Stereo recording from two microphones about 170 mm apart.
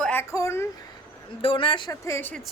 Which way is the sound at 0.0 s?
10° left (ahead or behind).